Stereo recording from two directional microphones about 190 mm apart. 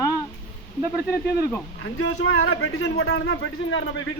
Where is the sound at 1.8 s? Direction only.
90° left.